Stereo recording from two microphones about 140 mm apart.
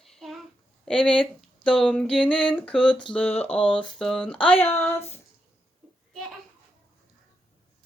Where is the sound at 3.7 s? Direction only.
5° left (ahead or behind).